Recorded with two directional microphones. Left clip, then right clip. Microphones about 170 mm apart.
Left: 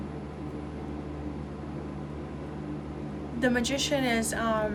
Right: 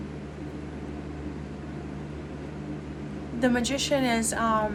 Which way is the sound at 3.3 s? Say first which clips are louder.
Right 1 dB; 20° right (ahead or behind).